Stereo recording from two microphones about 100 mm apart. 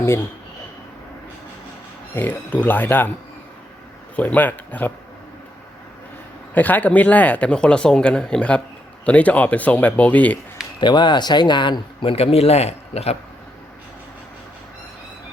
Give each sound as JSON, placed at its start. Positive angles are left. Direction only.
{"t": 2.1, "sound": "speech", "side_deg": 15}
{"t": 4.1, "sound": "speech", "side_deg": 15}
{"t": 6.5, "sound": "speech", "side_deg": 20}
{"t": 10.8, "sound": "speech", "side_deg": 50}
{"t": 12.1, "sound": "a man's voice", "side_deg": 85}